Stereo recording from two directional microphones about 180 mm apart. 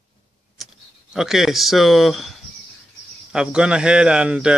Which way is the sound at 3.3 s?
5° right (ahead or behind).